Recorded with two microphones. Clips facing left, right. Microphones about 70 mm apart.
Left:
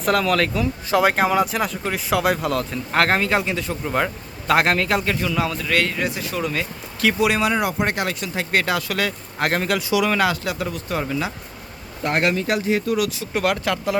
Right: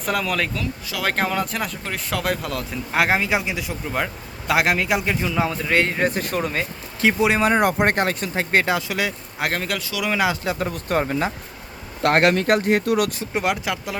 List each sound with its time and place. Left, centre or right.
0.0 s speech: centre
3.8 s a man's voice: centre; by 7.4 s right
7.4 s speech: right; by 9.1 s centre
9.4 s speech: centre
10.2 s a man's voice: right
10.7 s speech: right
12.0 s speech: right
13.3 s a man's voice: centre